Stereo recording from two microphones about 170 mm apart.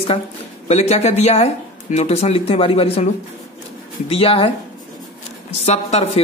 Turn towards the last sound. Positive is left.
turn(degrees=40)  # may be behind; listen again after turning